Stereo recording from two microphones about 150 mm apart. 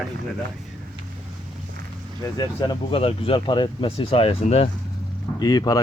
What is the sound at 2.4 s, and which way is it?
Speech, 35° left (ahead or behind).